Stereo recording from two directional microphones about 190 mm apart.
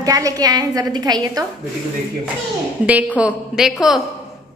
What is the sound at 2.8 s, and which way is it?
A woman's voice, 5° right (ahead or behind).